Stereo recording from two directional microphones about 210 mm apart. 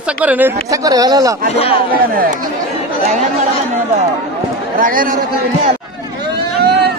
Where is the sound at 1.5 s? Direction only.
25° left (ahead or behind).